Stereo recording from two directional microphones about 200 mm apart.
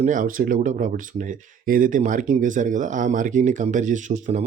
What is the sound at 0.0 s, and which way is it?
Speech, 40° right (ahead or behind).